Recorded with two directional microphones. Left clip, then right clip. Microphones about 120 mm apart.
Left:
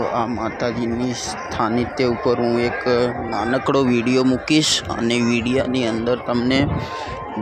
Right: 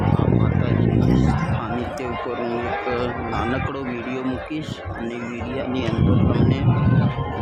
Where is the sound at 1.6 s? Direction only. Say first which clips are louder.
Left 7 dB; 90° left.